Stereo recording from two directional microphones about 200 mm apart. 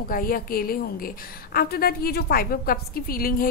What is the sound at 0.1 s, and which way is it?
Speech, 45° left (ahead or behind).